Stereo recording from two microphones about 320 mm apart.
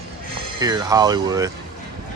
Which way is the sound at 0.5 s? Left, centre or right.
Centre.